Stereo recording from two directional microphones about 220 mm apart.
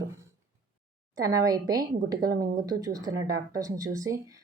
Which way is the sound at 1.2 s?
15° right (ahead or behind).